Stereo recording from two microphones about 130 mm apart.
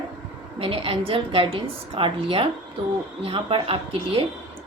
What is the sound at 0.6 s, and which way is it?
A woman's voice, 45° right (ahead or behind).